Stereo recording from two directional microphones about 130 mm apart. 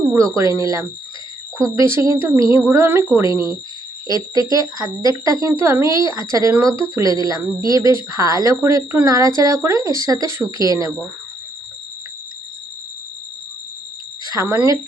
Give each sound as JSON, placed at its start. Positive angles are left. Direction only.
{"t": 0.1, "sound": "speech", "side_deg": -25}
{"t": 1.5, "sound": "speech", "side_deg": -25}
{"t": 14.4, "sound": "speech", "side_deg": -20}